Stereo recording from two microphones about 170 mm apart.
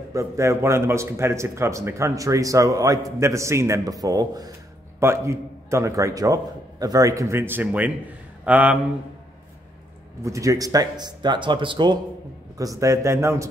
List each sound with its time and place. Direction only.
0.1 s a man's voice: 15° right (ahead or behind)
10.2 s a man's voice: 20° right (ahead or behind)